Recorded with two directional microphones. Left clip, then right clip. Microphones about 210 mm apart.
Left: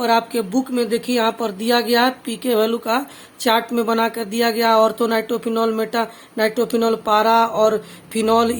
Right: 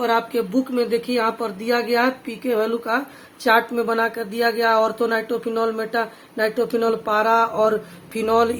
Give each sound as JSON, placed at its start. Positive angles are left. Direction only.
{"t": 0.0, "sound": "speech", "side_deg": 30}